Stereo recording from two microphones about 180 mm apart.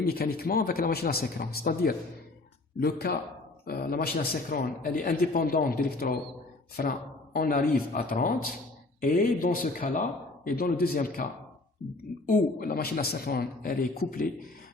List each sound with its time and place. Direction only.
0.0 s a man's voice: 60° left (ahead or behind)